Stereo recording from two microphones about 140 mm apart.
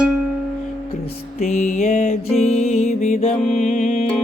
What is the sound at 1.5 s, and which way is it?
Mantra, 60° left (ahead or behind).